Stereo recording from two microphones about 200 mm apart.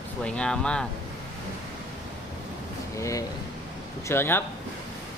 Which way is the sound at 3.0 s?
15° left (ahead or behind).